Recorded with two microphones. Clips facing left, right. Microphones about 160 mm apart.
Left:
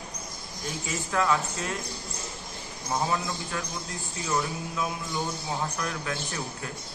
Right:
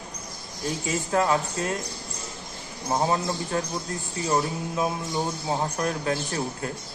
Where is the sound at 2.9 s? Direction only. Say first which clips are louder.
Right 4 dB; 30° right (ahead or behind).